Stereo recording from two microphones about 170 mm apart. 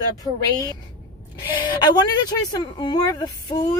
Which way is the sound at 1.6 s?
25° left (ahead or behind).